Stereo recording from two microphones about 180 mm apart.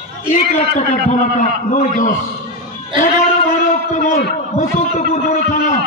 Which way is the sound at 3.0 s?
45° left (ahead or behind).